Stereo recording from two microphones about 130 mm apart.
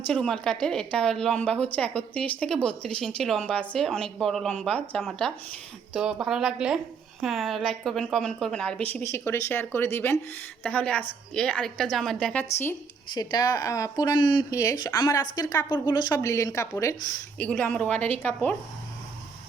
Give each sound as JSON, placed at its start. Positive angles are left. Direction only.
{"t": 0.1, "sound": "a woman's voice", "side_deg": 5}
{"t": 13.1, "sound": "speech", "side_deg": 30}
{"t": 17.3, "sound": "a woman's voice", "side_deg": 10}